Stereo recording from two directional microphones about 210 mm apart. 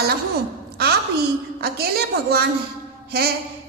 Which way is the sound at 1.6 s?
45° right (ahead or behind).